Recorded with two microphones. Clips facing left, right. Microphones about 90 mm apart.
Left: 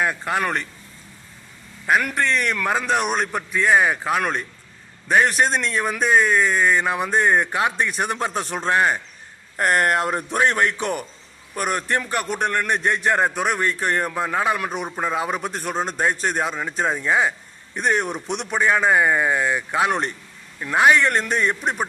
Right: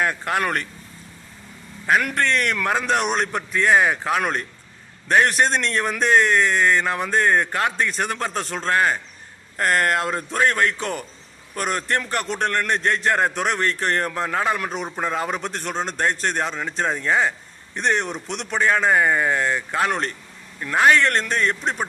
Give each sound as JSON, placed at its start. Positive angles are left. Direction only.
{"t": 0.0, "sound": "a man's voice", "side_deg": 5}
{"t": 1.9, "sound": "a man's voice", "side_deg": 0}